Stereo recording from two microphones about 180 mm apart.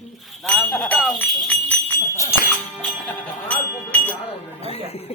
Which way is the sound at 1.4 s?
10° left (ahead or behind).